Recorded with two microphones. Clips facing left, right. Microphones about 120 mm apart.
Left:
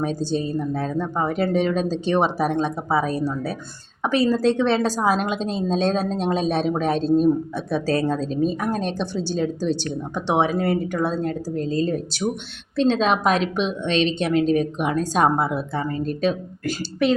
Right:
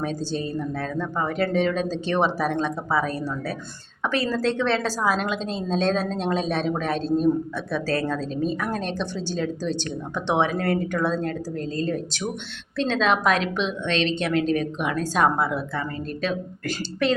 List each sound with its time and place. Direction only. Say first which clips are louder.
0.0 s a woman's voice: left 4 dB; 15° left (ahead or behind)
16.6 s a woman's voice: left 3 dB; 5° left (ahead or behind)